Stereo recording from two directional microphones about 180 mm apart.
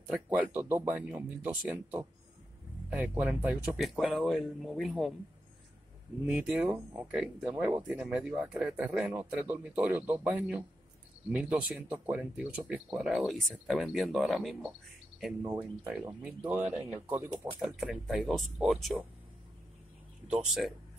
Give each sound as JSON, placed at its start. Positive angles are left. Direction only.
{"t": 0.1, "sound": "speech", "side_deg": -10}
{"t": 6.2, "sound": "speech", "side_deg": -5}
{"t": 16.6, "sound": "speech", "side_deg": -40}
{"t": 17.0, "sound": "speech", "side_deg": -10}
{"t": 20.4, "sound": "speech", "side_deg": 0}